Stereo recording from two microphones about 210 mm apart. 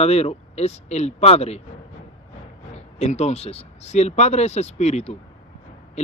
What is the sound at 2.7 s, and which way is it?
Speech, 30° left (ahead or behind).